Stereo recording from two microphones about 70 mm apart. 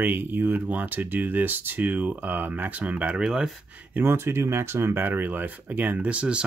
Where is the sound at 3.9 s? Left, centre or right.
Right.